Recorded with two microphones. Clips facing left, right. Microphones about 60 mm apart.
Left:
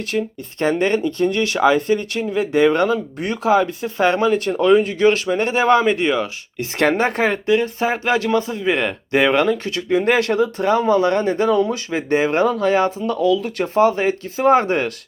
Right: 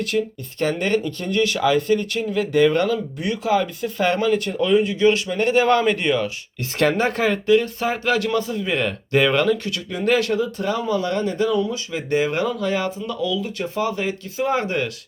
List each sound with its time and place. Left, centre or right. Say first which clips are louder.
0.0 s speech: even; left
4.5 s speech: left 4 dB; left